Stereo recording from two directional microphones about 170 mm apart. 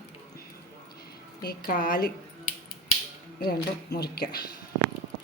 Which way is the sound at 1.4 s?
70° left (ahead or behind).